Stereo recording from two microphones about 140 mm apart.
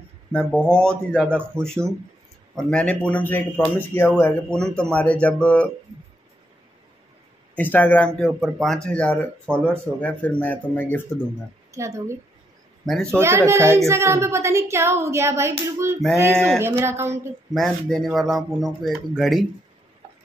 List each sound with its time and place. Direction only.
0.3 s a man's voice: 5° left (ahead or behind)
1.4 s speech: 20° right (ahead or behind)
2.5 s a man's voice: 5° left (ahead or behind)
7.5 s a man's voice: 10° left (ahead or behind)
11.7 s a woman's voice: 20° right (ahead or behind)
12.8 s a man's voice: 5° left (ahead or behind)
13.1 s a woman's voice: 20° right (ahead or behind)
17.6 s speech: centre (ahead or behind)